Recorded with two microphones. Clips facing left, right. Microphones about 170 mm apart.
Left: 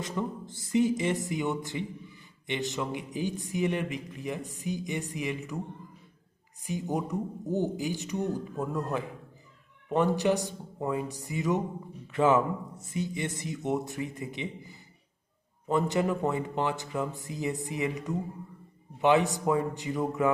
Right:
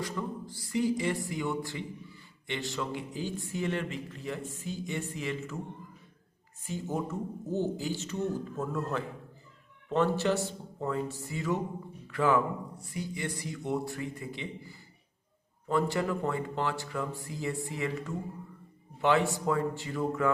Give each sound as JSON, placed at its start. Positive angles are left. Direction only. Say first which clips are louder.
{"t": 0.0, "sound": "speech", "louder": "left 2 dB", "side_deg": 20}
{"t": 6.6, "sound": "speech", "louder": "left 2 dB", "side_deg": 15}